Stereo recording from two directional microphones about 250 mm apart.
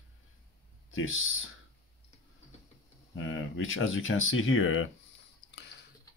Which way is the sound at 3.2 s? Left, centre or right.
Left.